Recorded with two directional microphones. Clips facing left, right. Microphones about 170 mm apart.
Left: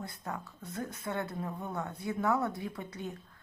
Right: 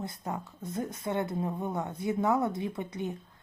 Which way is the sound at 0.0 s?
20° right (ahead or behind).